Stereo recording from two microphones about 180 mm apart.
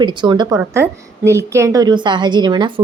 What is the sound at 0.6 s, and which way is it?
Speech, 15° right (ahead or behind).